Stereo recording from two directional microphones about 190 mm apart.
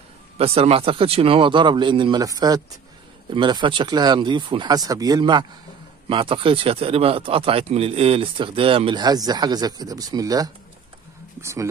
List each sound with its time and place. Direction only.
0.4 s speech: 30° right (ahead or behind)